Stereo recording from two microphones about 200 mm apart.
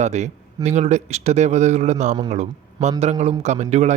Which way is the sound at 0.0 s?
35° right (ahead or behind).